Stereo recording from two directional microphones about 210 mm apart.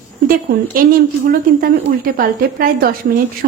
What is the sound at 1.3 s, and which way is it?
A woman's voice, 45° right (ahead or behind).